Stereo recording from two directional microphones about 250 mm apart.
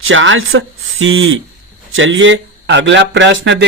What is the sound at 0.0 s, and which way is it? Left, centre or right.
Speech, right.